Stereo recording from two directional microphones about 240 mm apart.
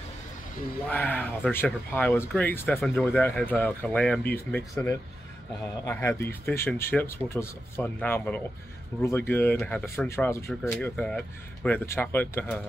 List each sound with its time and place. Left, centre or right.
0.8 s speech: centre